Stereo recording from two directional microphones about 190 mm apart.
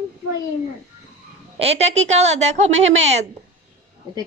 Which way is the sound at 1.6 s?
35° right (ahead or behind).